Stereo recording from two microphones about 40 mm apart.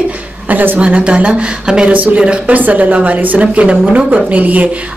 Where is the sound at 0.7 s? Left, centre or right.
Right.